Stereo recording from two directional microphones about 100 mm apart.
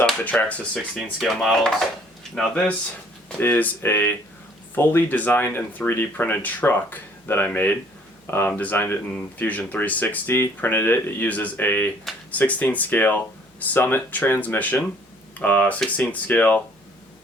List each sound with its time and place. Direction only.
0.0 s speech: 10° left (ahead or behind)
1.2 s speech: centre (ahead or behind)
3.4 s speech: 20° left (ahead or behind)